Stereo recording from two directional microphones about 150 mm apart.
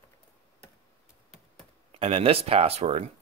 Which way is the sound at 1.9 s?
40° right (ahead or behind).